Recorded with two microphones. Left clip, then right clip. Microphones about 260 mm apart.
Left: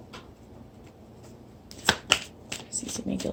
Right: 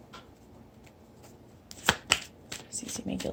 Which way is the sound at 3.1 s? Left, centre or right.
Right.